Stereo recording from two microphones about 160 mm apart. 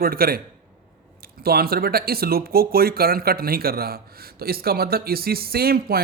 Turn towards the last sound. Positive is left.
turn(degrees=-70)  # may be behind; listen again after turning